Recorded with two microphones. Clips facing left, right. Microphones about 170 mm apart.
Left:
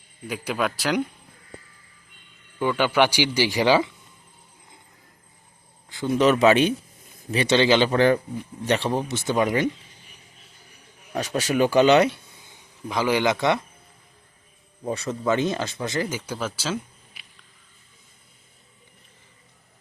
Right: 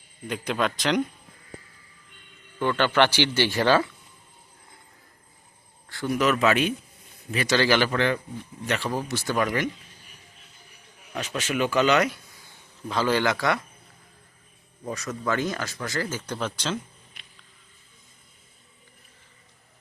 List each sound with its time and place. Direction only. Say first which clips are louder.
0.3 s speech: even; 5° left (ahead or behind)
2.6 s speech: left 1 dB; 10° left (ahead or behind)
5.9 s speech: left 4 dB; 20° left (ahead or behind)
7.9 s speech: left 6 dB; 40° left (ahead or behind); by 9.6 s 20° left (ahead or behind)
11.1 s speech: left 5 dB; 35° left (ahead or behind)
14.8 s speech: left 4 dB; 30° left (ahead or behind); by 17.2 s 5° left (ahead or behind)